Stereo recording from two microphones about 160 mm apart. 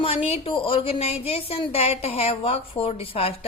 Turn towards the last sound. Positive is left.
turn(degrees=35)  # may be behind; listen again after turning